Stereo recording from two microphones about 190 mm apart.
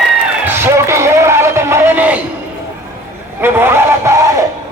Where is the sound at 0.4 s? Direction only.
15° right (ahead or behind).